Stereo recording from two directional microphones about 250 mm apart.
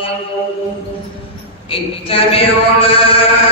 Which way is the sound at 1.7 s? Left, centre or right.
Left.